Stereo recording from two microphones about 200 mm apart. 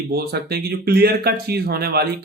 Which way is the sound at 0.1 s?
50° right (ahead or behind).